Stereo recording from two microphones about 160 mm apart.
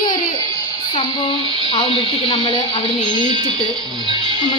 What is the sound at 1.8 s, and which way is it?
Speech, 35° left (ahead or behind).